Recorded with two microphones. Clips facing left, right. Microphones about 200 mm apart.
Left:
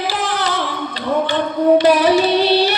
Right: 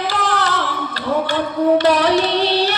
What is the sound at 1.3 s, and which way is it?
Carnatic music, centre (ahead or behind).